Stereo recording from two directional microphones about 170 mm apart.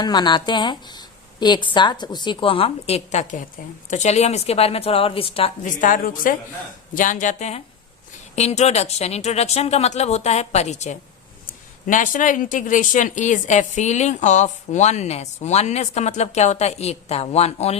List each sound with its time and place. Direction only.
0.0 s speech: 25° left (ahead or behind)
5.6 s speech: 50° left (ahead or behind)